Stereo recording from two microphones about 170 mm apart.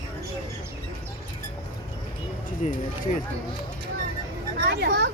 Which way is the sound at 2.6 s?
45° left (ahead or behind).